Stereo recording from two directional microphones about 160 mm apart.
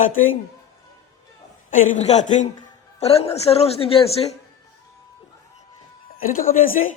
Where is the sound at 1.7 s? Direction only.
45° left (ahead or behind).